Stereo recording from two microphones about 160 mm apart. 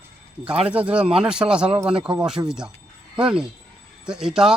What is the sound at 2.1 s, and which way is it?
Speech, 30° right (ahead or behind).